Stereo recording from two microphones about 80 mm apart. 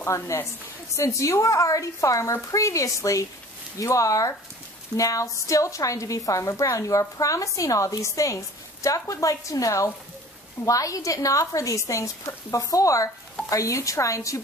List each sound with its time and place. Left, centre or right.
0.0 s a woman's voice: left